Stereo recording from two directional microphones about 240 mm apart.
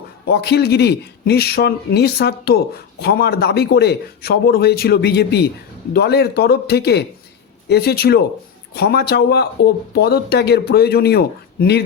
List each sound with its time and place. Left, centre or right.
0.3 s speech: left